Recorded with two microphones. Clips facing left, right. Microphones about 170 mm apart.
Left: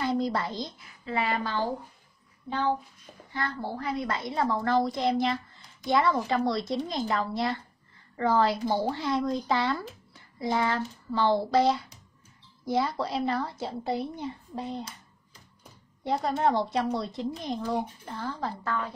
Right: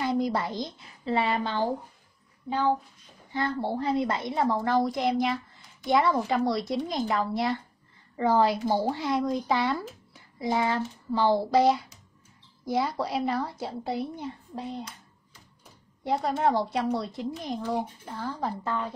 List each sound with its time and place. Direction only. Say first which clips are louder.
0.0 s a woman's voice: right 1 dB; 15° right (ahead or behind)
0.7 s a woman's voice: right 6 dB; 30° right (ahead or behind)
3.3 s a woman's voice: right 5 dB; 25° right (ahead or behind); by 14.9 s 5° right (ahead or behind)
16.0 s a woman's voice: even; 5° right (ahead or behind)
18.6 s a woman's voice: right 1 dB; 20° right (ahead or behind)